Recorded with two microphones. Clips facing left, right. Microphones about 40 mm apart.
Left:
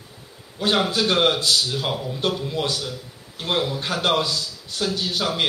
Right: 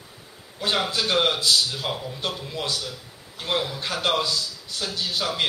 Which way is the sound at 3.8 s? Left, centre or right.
Centre.